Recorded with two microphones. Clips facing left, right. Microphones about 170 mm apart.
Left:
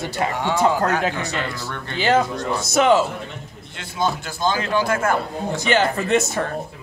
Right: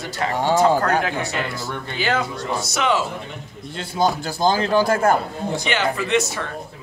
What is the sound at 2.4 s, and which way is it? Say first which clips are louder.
Speech: left 4 dB; 50° left (ahead or behind).